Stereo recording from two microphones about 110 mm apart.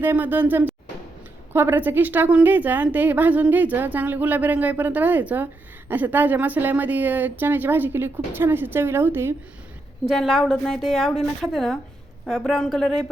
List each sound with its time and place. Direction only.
0.0 s a woman's voice: 20° right (ahead or behind)
10.1 s a woman's voice: centre (ahead or behind)